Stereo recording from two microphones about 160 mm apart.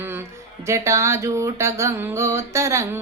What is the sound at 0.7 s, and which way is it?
Music, 20° right (ahead or behind).